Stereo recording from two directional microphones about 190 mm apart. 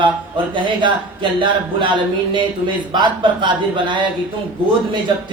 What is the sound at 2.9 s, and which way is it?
Speech, 25° right (ahead or behind).